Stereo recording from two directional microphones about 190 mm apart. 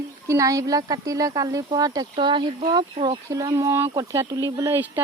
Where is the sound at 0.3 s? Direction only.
15° right (ahead or behind).